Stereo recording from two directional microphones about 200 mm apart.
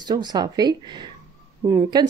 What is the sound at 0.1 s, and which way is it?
A woman's voice, 20° right (ahead or behind).